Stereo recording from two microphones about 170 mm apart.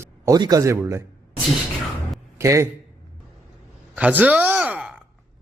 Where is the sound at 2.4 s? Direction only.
15° right (ahead or behind).